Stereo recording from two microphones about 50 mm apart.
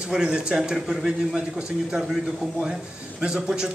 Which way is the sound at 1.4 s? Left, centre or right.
Right.